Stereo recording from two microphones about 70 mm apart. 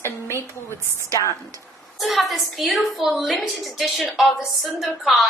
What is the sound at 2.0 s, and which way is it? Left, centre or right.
A woman's voice, centre.